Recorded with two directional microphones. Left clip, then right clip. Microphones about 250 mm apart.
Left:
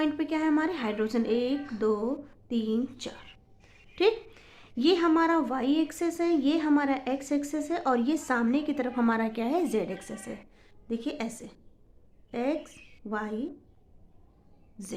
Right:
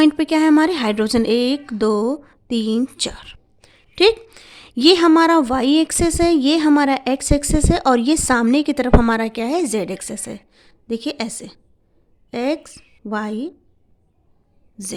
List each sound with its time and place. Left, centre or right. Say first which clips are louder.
0.0 s a woman's voice: right 13 dB; right